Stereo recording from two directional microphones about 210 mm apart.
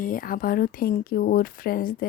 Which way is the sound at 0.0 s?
40° left (ahead or behind).